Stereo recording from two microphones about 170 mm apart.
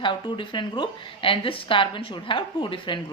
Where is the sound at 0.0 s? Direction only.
30° left (ahead or behind).